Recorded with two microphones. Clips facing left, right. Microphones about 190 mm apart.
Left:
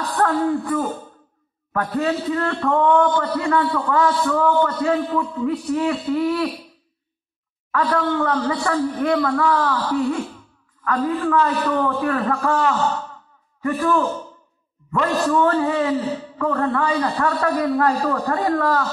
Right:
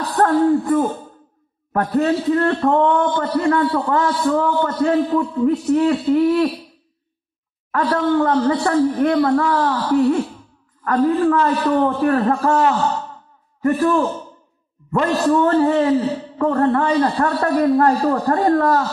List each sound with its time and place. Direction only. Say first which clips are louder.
0.2 s a man's voice: right 5 dB; 40° right (ahead or behind)
7.7 s a man's voice: right 3 dB; 40° right (ahead or behind)